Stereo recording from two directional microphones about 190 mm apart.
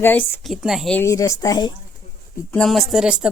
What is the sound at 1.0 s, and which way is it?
Speech, 15° left (ahead or behind).